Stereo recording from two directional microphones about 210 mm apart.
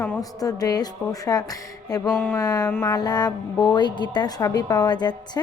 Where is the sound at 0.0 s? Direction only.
15° left (ahead or behind).